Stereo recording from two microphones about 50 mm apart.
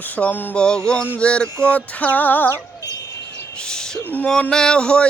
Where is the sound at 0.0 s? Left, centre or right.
Left.